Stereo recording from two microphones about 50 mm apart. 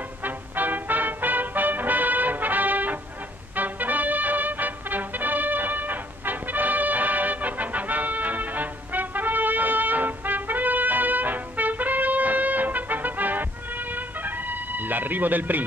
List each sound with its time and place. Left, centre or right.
0.2 s music: right